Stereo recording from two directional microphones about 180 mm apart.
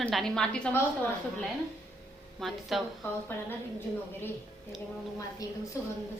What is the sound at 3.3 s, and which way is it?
Speech, 10° left (ahead or behind).